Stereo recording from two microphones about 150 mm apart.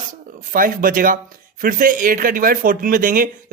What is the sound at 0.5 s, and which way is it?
Speech, 70° right (ahead or behind).